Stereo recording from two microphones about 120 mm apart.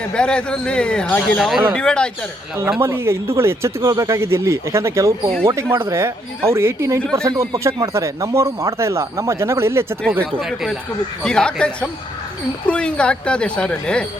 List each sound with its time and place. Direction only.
0.1 s speech: 10° left (ahead or behind)
2.8 s speech: 20° right (ahead or behind)
10.4 s speech: 5° right (ahead or behind)